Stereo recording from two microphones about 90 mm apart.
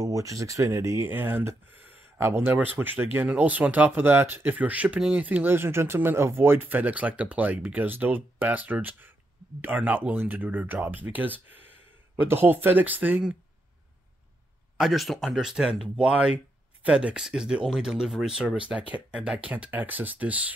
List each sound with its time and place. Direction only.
0.0 s speech: 40° right (ahead or behind)
1.0 s speech: 25° right (ahead or behind)
14.8 s speech: centre (ahead or behind); by 20.5 s 15° right (ahead or behind)